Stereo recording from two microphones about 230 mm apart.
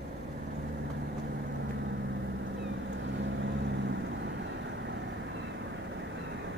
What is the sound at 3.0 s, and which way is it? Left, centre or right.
Vehicle, right.